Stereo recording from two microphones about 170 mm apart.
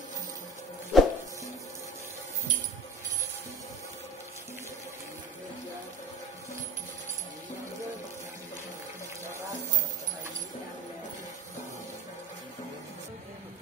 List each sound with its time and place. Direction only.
0.9 s music: centre (ahead or behind)